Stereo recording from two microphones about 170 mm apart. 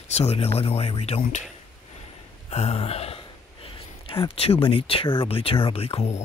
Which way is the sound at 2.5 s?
35° left (ahead or behind).